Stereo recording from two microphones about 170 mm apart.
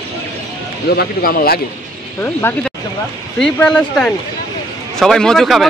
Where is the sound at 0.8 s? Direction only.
60° left (ahead or behind).